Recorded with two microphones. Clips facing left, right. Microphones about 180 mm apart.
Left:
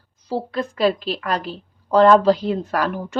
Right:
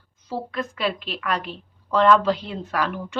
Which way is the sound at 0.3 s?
35° left (ahead or behind).